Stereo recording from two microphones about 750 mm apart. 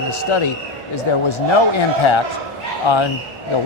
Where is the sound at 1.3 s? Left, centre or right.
Left.